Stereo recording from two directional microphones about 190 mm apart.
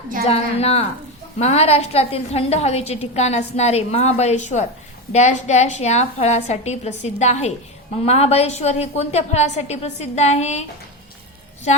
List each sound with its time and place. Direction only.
0.3 s a woman's voice: 35° left (ahead or behind)